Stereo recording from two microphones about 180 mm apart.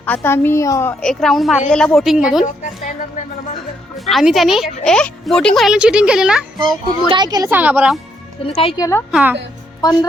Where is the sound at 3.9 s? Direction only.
Centre (ahead or behind).